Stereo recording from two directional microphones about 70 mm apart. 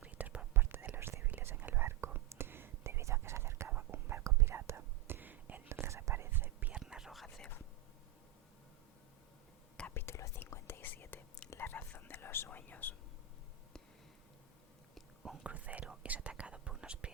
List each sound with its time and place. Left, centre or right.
0.0 s whispering: right
0.5 s whispering: right
3.7 s whispering: right
4.2 s whispering: right
5.6 s whispering: right
6.7 s whispering: centre
9.9 s whispering: left
14.9 s whispering: centre
15.4 s whispering: right